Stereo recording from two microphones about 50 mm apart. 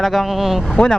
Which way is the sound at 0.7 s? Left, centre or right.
Centre.